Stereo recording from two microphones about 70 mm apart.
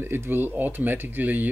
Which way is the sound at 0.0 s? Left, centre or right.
Right.